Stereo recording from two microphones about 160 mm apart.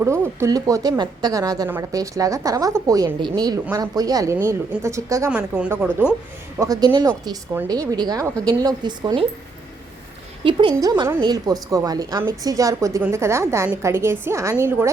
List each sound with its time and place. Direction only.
0.0 s a woman's voice: 15° right (ahead or behind)
5.3 s a woman's voice: 10° right (ahead or behind)
6.6 s a woman's voice: 25° right (ahead or behind)
10.4 s a woman's voice: 30° right (ahead or behind); by 14.8 s 15° right (ahead or behind)